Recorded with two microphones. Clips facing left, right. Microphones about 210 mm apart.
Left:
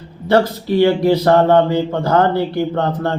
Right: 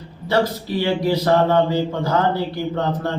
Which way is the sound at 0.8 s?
55° left (ahead or behind).